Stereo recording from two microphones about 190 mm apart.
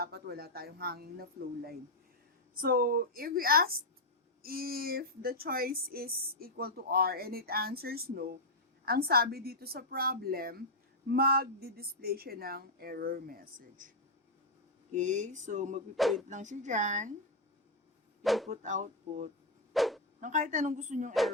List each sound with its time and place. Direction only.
0.0 s speech: 55° right (ahead or behind)
14.9 s speech: 40° right (ahead or behind)
16.0 s speech: centre (ahead or behind)
16.3 s speech: 40° right (ahead or behind)
18.2 s a sound: centre (ahead or behind)
18.4 s speech: 40° right (ahead or behind)
19.7 s dog: centre (ahead or behind)
20.2 s speech: 40° right (ahead or behind)
21.1 s speech: centre (ahead or behind)